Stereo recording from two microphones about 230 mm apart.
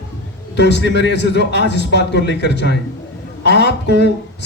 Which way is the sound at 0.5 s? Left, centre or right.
Left.